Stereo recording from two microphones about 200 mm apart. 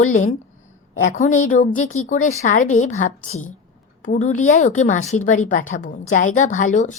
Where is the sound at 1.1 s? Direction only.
40° left (ahead or behind).